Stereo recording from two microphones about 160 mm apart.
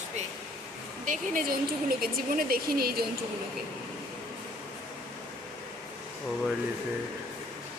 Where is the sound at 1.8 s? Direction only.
70° right (ahead or behind).